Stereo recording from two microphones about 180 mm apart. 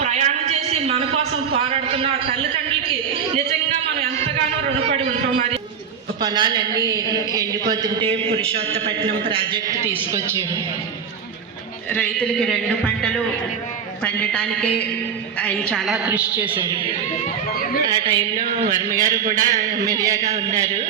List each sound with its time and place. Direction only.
0.0 s a sound: 40° right (ahead or behind)
6.2 s a man's voice: 25° right (ahead or behind)
9.6 s a man's voice: 15° right (ahead or behind)
11.9 s a man's voice: 5° left (ahead or behind)
16.0 s a man's voice: 10° right (ahead or behind)
17.8 s a man's voice: 25° right (ahead or behind); by 19.8 s 45° right (ahead or behind)
19.8 s a man's voice: 20° right (ahead or behind)